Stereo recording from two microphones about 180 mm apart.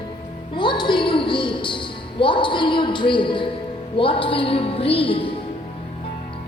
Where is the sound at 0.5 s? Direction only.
25° left (ahead or behind).